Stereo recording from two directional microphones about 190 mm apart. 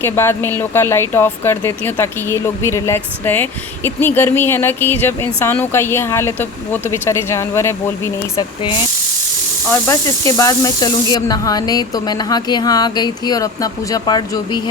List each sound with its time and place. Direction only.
0.0 s speech: 10° left (ahead or behind)
9.8 s speech: 15° left (ahead or behind)